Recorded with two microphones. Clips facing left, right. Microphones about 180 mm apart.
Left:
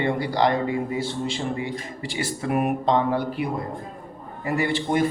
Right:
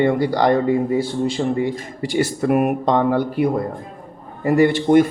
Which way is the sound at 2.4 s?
55° right (ahead or behind).